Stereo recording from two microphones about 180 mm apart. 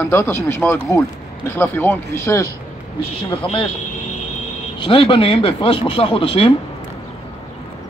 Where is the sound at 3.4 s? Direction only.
30° left (ahead or behind).